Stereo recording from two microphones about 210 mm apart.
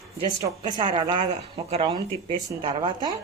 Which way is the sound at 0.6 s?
20° right (ahead or behind).